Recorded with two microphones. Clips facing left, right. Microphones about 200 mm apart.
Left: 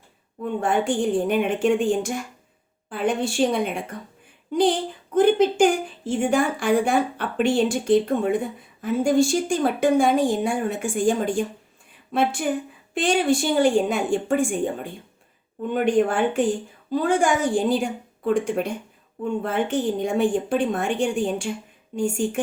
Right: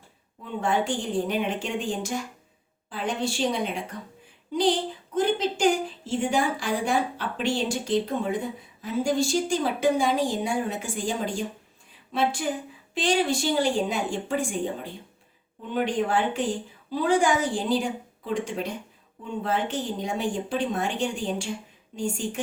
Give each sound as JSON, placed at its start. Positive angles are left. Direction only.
{"t": 0.4, "sound": "a woman's voice", "side_deg": 55}
{"t": 15.7, "sound": "speech", "side_deg": 50}